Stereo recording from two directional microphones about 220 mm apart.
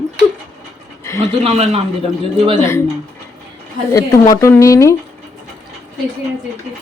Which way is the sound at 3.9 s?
15° left (ahead or behind).